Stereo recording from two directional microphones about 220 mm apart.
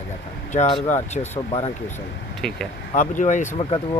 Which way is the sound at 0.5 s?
30° left (ahead or behind).